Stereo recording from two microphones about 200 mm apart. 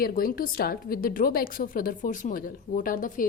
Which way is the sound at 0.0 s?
45° left (ahead or behind).